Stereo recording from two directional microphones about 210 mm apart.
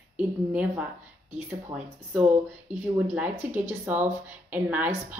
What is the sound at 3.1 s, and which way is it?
Speech, 10° right (ahead or behind).